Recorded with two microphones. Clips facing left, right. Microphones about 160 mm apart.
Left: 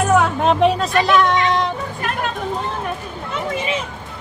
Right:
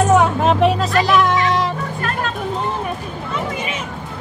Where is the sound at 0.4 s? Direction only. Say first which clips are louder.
Even; centre (ahead or behind).